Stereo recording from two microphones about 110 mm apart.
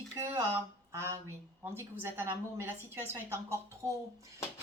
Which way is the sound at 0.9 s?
30° right (ahead or behind).